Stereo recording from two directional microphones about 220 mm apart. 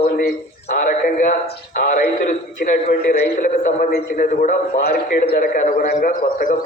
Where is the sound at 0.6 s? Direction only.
35° left (ahead or behind).